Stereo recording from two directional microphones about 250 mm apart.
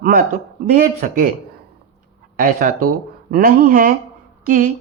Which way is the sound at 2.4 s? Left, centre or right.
Right.